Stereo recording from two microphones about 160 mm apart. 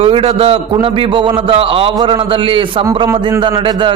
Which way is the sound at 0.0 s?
35° right (ahead or behind).